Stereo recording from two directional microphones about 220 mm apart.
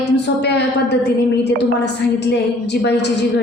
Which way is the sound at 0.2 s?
50° left (ahead or behind).